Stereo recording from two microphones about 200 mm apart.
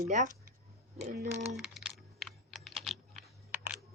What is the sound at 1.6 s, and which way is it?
Typing, centre (ahead or behind).